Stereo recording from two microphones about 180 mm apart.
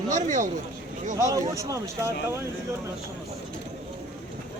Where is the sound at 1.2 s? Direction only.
20° right (ahead or behind).